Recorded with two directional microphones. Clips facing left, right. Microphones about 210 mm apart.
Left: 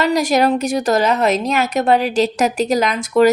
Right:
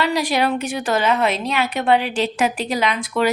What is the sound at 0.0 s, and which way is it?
A woman's voice, 45° left (ahead or behind).